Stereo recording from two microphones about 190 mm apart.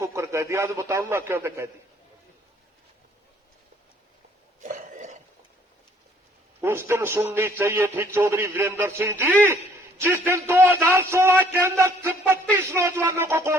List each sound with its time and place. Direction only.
0.0 s a man's voice: 15° right (ahead or behind)
4.6 s a sound: 40° right (ahead or behind)
6.6 s a man's voice: 10° right (ahead or behind)